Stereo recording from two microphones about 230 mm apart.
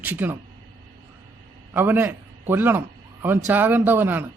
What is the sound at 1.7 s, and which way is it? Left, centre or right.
A man's voice, centre.